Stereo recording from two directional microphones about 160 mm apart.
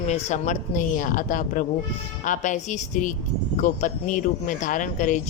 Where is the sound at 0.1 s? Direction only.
45° left (ahead or behind).